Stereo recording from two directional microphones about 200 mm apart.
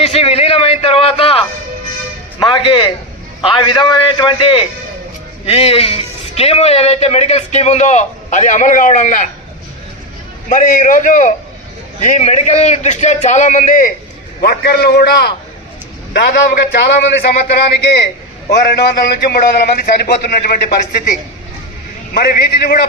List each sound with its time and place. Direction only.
0.0 s a sound: 30° left (ahead or behind)
2.4 s a man's voice: 25° left (ahead or behind); by 9.3 s 40° left (ahead or behind)
10.5 s a man's voice: 40° left (ahead or behind)